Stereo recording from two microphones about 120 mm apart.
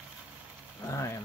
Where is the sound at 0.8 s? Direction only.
25° left (ahead or behind).